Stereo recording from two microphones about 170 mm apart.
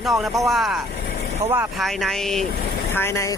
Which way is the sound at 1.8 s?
Centre (ahead or behind).